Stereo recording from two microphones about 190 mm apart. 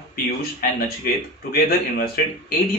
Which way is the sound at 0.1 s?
50° left (ahead or behind).